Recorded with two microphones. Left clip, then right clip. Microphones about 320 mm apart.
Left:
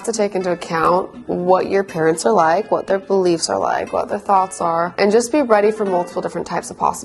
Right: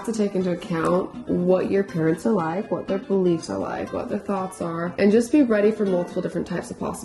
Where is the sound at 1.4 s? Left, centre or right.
Left.